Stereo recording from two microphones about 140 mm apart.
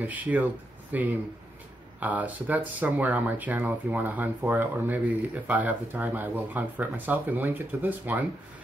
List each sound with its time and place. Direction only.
0.0 s speech: 10° right (ahead or behind)